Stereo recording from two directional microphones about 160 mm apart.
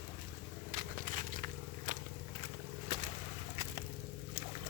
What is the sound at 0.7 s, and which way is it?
Biting, 55° right (ahead or behind).